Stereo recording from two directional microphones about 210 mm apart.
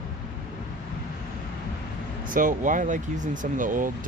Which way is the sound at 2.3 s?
40° right (ahead or behind).